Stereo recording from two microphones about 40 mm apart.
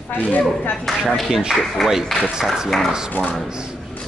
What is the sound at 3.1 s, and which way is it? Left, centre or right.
Speech, left.